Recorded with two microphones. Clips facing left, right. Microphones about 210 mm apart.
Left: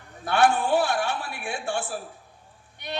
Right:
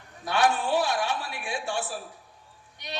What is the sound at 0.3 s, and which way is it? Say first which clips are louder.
A man's voice: left 3 dB; 55° left (ahead or behind).